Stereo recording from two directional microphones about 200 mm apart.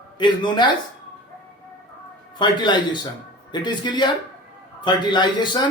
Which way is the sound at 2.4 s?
20° left (ahead or behind).